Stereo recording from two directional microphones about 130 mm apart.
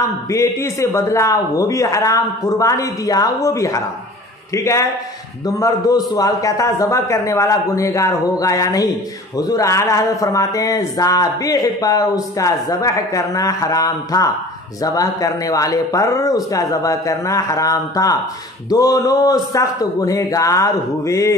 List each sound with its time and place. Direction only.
0.3 s speech: 20° left (ahead or behind)